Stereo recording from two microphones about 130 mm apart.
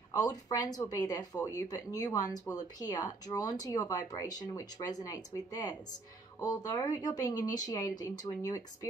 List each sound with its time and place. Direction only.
0.2 s speech: 30° left (ahead or behind)